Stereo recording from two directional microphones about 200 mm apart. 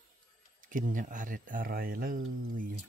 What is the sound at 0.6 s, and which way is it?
Speech, 40° right (ahead or behind).